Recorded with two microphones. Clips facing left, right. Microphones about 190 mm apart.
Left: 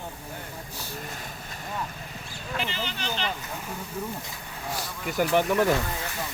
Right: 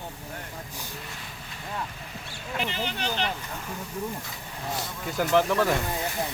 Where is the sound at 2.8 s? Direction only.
60° right (ahead or behind).